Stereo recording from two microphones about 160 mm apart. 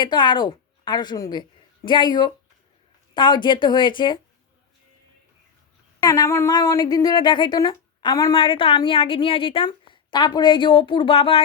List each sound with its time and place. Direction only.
0.0 s a woman's voice: 30° left (ahead or behind)
6.0 s a woman's voice: 20° left (ahead or behind); by 11.4 s 35° left (ahead or behind)